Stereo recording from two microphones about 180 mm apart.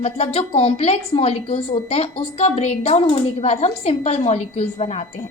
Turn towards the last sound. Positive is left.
turn(degrees=35)  # may be behind; listen again after turning